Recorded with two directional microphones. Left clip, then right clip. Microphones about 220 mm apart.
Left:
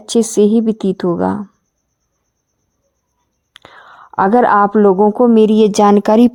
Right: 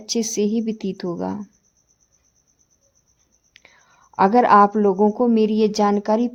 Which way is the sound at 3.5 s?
25° left (ahead or behind).